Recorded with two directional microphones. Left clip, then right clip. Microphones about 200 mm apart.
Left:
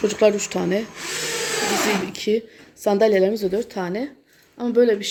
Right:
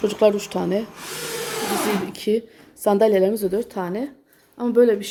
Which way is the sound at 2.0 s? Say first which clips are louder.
Even; centre (ahead or behind).